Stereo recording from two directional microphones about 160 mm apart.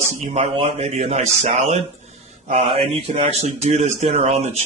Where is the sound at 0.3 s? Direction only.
40° right (ahead or behind).